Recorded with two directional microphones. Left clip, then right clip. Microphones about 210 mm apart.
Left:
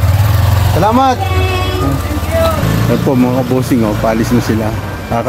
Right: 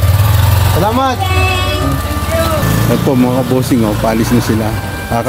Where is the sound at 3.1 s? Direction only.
5° right (ahead or behind).